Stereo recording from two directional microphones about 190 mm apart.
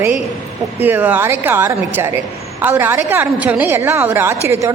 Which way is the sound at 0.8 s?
10° right (ahead or behind).